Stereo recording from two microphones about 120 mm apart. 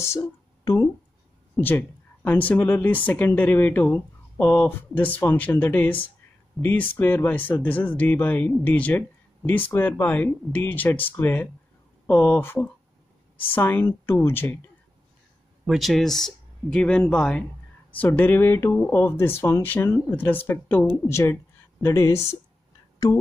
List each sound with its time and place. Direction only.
0.0 s speech: 25° left (ahead or behind)
15.6 s speech: centre (ahead or behind); by 22.2 s 25° left (ahead or behind)